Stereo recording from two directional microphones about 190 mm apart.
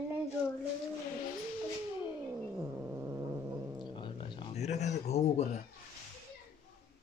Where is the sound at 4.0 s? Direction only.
25° left (ahead or behind).